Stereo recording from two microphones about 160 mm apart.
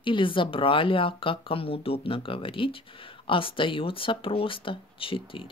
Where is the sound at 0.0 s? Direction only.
30° left (ahead or behind).